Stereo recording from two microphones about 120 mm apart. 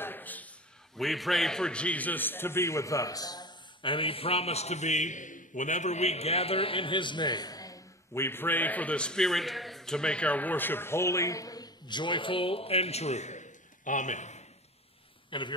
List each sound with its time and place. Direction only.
0.0 s a sound: 15° left (ahead or behind)
0.9 s a man's voice: centre (ahead or behind); by 14.4 s 80° left
15.2 s speech: 40° left (ahead or behind)